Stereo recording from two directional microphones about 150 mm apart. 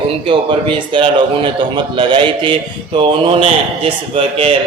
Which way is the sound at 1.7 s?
35° right (ahead or behind).